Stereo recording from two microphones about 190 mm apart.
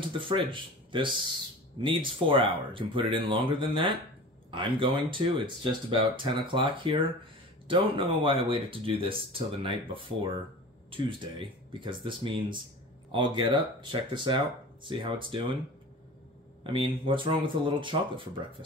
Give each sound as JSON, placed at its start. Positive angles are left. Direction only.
{"t": 0.2, "sound": "speech", "side_deg": -25}
{"t": 10.9, "sound": "speech", "side_deg": -25}
{"t": 16.7, "sound": "speech", "side_deg": -25}